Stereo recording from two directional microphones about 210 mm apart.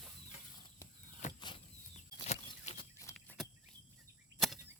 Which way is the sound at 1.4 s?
25° left (ahead or behind).